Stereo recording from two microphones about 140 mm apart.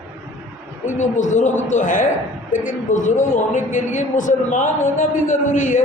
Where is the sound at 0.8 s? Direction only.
60° left (ahead or behind).